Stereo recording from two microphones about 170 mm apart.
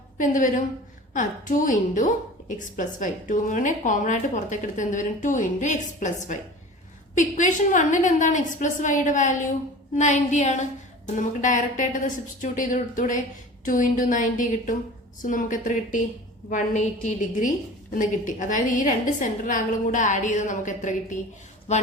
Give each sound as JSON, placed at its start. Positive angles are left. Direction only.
{"t": 0.2, "sound": "a woman's voice", "side_deg": 50}